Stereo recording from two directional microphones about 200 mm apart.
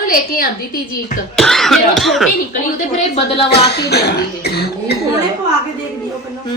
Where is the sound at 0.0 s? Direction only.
45° left (ahead or behind).